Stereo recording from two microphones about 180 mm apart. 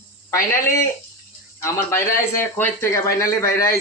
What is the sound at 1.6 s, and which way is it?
Speech, 15° left (ahead or behind).